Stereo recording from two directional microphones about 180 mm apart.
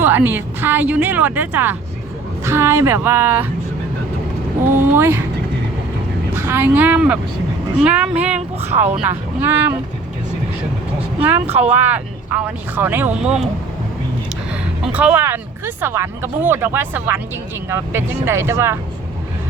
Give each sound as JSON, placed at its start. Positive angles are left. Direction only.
{"t": 0.0, "sound": "speech", "side_deg": -10}
{"t": 4.9, "sound": "speech", "side_deg": -10}
{"t": 6.3, "sound": "speech", "side_deg": -10}
{"t": 11.2, "sound": "speech", "side_deg": -10}
{"t": 11.4, "sound": "speech", "side_deg": -35}
{"t": 11.7, "sound": "speech", "side_deg": -10}
{"t": 14.5, "sound": "speech", "side_deg": -10}